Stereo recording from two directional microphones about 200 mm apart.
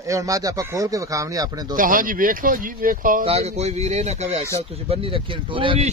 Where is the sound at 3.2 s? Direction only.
30° right (ahead or behind).